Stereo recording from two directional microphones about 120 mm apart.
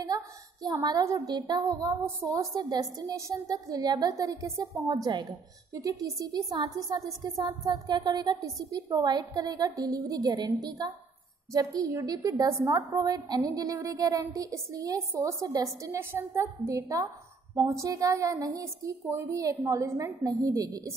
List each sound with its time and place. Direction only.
0.0 s a woman's voice: 30° right (ahead or behind)